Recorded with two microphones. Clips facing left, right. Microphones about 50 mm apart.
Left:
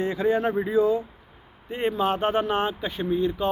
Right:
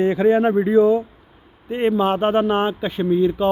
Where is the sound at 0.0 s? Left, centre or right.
Right.